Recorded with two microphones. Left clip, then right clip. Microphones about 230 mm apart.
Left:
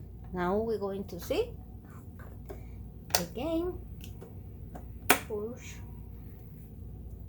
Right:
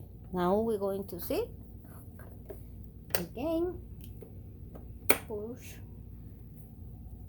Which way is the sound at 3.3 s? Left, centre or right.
Right.